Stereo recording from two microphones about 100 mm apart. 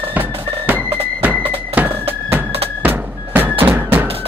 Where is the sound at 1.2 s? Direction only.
15° right (ahead or behind).